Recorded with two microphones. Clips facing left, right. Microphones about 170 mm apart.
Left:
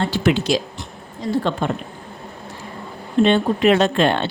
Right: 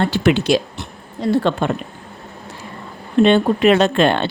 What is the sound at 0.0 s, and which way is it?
A woman's voice, 65° right (ahead or behind).